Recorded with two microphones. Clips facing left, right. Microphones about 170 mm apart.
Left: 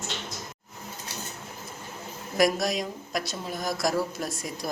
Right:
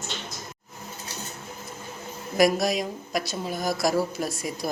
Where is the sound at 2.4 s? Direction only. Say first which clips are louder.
Right 3 dB; centre (ahead or behind).